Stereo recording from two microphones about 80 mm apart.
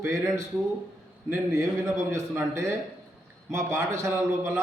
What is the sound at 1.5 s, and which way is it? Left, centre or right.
A man's voice, right.